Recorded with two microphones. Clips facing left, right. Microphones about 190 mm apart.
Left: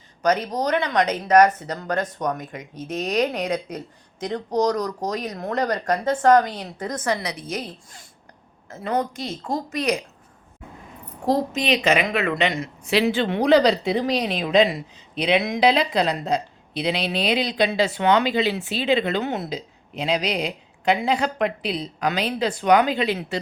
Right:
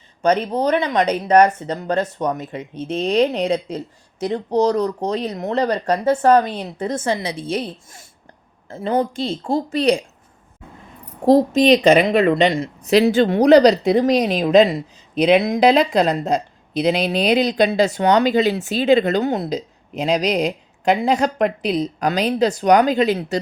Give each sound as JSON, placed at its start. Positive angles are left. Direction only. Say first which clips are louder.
{"t": 0.2, "sound": "a woman's voice", "louder": "right 4 dB", "side_deg": -30}
{"t": 11.3, "sound": "a woman's voice", "louder": "right 9 dB", "side_deg": -35}